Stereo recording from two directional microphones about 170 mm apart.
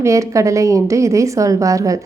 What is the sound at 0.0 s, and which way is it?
A woman's voice, 20° right (ahead or behind).